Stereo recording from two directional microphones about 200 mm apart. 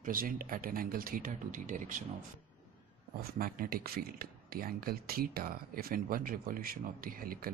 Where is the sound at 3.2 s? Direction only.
45° right (ahead or behind).